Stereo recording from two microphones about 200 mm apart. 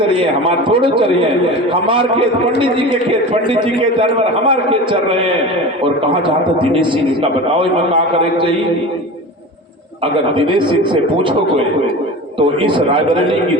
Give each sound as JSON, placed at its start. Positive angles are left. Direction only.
{"t": 0.2, "sound": "a man's voice", "side_deg": -25}
{"t": 10.3, "sound": "a man's voice", "side_deg": -25}
{"t": 12.4, "sound": "a man's voice", "side_deg": -25}